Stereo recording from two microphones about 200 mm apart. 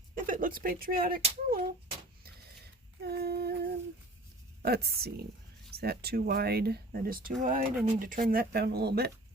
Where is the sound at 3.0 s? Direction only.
55° right (ahead or behind).